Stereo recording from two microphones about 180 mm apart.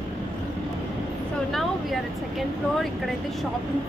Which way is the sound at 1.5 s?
Centre (ahead or behind).